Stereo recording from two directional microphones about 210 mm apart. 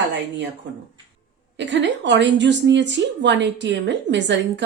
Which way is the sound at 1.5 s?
55° right (ahead or behind).